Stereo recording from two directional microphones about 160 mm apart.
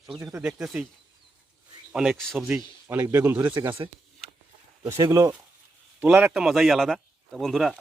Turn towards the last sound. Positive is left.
turn(degrees=0)  # may be behind; listen again after turning